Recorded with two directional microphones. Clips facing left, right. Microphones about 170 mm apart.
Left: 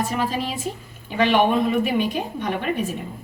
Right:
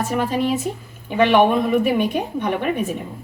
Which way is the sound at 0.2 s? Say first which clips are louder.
Right 5 dB; 50° right (ahead or behind).